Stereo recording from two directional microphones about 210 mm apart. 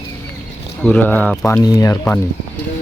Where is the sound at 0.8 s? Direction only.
5° left (ahead or behind).